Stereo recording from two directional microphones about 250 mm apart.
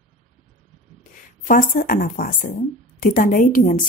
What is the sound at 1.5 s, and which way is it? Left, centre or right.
Speech, left.